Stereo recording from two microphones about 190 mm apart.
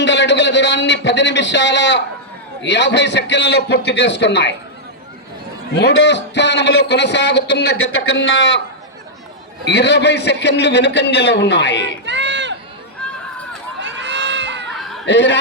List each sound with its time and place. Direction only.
0.0 s a man's voice: 65° left (ahead or behind)
5.7 s a man's voice: 65° left (ahead or behind)
8.1 s a man's voice: 75° left (ahead or behind)
9.6 s a man's voice: 60° left (ahead or behind)
12.0 s run: 70° right (ahead or behind)
13.8 s crowd: 65° right (ahead or behind)
15.0 s a man's voice: 65° left (ahead or behind)